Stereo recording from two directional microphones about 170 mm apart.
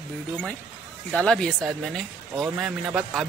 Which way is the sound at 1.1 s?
5° left (ahead or behind).